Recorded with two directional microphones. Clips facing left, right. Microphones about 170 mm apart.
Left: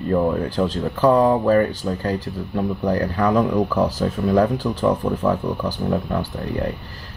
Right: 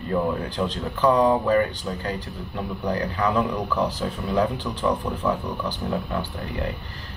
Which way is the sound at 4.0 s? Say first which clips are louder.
Left 6 dB; 40° left (ahead or behind).